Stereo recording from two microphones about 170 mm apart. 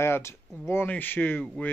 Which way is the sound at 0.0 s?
15° left (ahead or behind).